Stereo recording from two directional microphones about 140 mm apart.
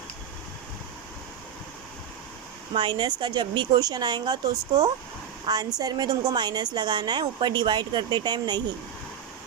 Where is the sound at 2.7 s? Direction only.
35° right (ahead or behind).